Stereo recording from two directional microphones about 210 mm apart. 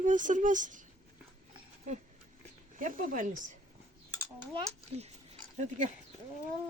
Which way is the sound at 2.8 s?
40° right (ahead or behind).